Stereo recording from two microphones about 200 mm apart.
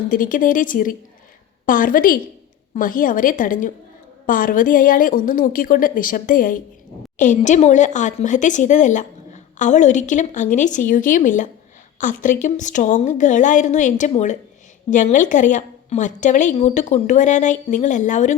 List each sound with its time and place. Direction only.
0.1 s a woman's voice: 40° left (ahead or behind)